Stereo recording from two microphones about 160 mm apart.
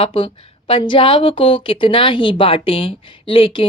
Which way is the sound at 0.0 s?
35° left (ahead or behind).